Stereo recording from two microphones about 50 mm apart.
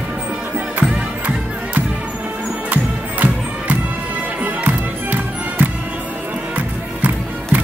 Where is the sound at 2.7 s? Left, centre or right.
Right.